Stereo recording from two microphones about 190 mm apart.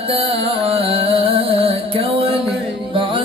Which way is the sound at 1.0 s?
30° right (ahead or behind).